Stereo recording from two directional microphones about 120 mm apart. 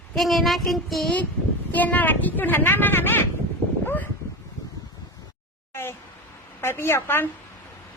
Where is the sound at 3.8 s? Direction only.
15° left (ahead or behind).